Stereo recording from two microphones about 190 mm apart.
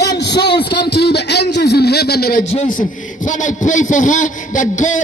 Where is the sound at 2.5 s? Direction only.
40° left (ahead or behind).